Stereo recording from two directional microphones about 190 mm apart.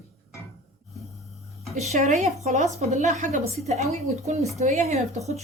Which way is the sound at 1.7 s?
35° right (ahead or behind).